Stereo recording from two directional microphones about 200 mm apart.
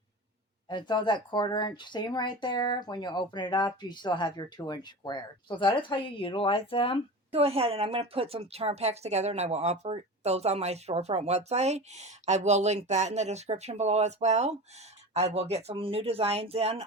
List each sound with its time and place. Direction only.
0.7 s speech: 20° left (ahead or behind)
7.3 s a woman's voice: 30° right (ahead or behind)